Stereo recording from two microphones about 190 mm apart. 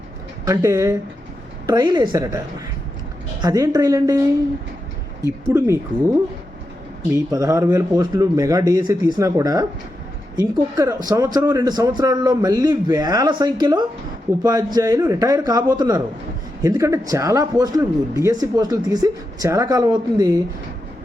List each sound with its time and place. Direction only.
0.4 s speech: 15° right (ahead or behind)
3.4 s speech: 20° right (ahead or behind)
5.5 s speech: 15° right (ahead or behind)
7.3 s speech: 15° right (ahead or behind)